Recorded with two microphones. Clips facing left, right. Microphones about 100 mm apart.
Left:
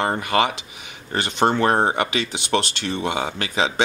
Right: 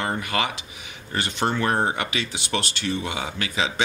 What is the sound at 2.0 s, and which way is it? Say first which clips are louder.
Speech: left 5 dB; 60° left (ahead or behind).